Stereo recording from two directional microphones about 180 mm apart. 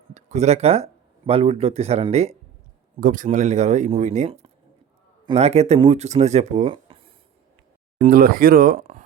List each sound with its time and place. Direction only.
0.1 s speech: 40° right (ahead or behind)
3.0 s speech: 50° right (ahead or behind); by 7.1 s 30° right (ahead or behind)
8.0 s speech: 55° right (ahead or behind)